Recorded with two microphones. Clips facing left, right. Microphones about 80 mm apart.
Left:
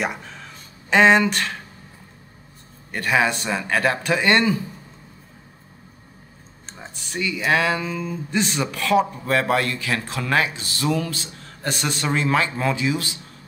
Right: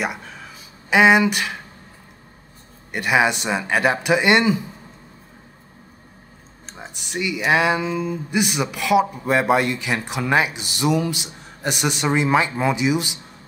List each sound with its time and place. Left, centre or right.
0.0 s a sound: centre
2.9 s speech: centre
6.9 s speech: centre